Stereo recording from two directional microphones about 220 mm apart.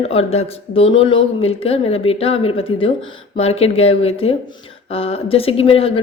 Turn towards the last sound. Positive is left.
turn(degrees=25)  # may be behind; listen again after turning